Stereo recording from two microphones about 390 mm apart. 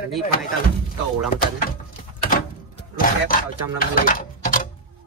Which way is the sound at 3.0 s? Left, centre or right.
Left.